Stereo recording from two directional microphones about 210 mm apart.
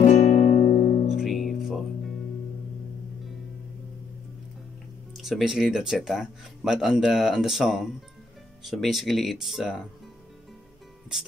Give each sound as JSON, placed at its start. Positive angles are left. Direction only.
{"t": 0.0, "sound": "music", "side_deg": 30}
{"t": 1.1, "sound": "music", "side_deg": 0}
{"t": 5.1, "sound": "speech", "side_deg": 0}